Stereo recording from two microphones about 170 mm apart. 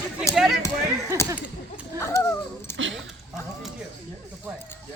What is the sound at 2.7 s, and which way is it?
Speech, 90° right.